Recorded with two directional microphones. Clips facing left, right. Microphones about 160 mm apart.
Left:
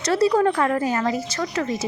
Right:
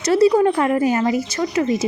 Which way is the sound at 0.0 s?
10° right (ahead or behind).